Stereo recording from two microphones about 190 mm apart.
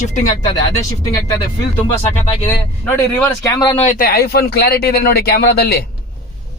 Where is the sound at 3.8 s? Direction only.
45° left (ahead or behind).